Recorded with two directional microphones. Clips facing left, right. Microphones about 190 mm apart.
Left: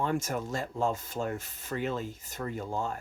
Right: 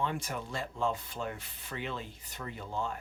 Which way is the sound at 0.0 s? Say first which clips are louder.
Left 5 dB; 45° left (ahead or behind).